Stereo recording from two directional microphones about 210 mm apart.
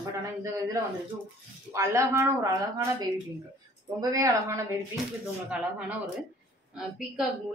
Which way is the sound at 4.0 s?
15° right (ahead or behind).